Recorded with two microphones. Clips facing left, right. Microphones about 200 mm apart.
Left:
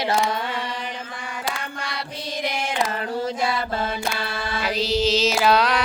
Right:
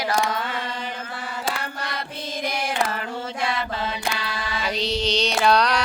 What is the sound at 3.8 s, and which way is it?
Mantra, 50° left (ahead or behind).